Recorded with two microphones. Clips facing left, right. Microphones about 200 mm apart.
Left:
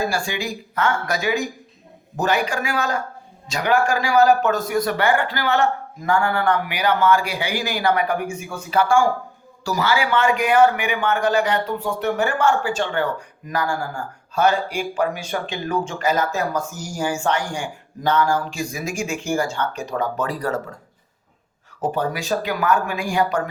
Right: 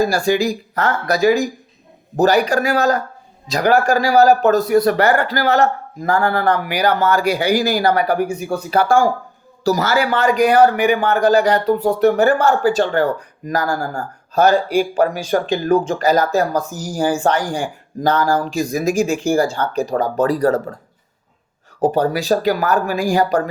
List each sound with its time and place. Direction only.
0.0 s a man's voice: 40° right (ahead or behind)
21.8 s a man's voice: 35° right (ahead or behind)